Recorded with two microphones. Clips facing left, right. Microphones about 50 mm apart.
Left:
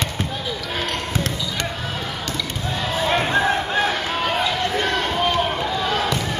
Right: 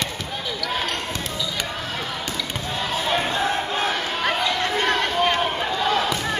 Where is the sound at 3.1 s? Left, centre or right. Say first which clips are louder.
Left 4 dB; left.